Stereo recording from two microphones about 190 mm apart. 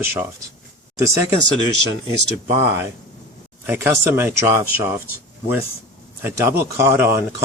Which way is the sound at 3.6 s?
10° right (ahead or behind).